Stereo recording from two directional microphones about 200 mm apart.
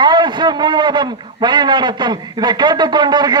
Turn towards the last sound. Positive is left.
turn(degrees=-20)  # may be behind; listen again after turning